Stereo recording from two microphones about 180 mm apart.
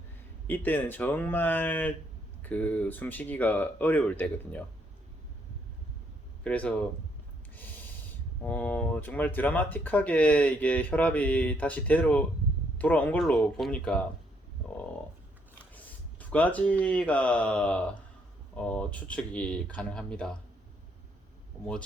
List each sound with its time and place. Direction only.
0.4 s speech: 10° left (ahead or behind)
6.4 s speech: 5° left (ahead or behind)
7.5 s snort: 10° left (ahead or behind)
8.4 s speech: 10° left (ahead or behind)
15.7 s speech: 10° left (ahead or behind)